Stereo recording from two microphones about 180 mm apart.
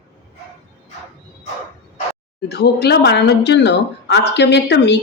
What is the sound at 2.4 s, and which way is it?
A woman's voice, 65° left (ahead or behind).